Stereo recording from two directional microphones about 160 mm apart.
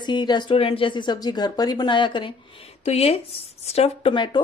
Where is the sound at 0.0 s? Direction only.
30° left (ahead or behind).